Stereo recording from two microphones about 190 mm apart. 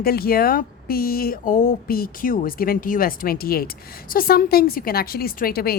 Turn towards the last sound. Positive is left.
turn(degrees=55)  # may be behind; listen again after turning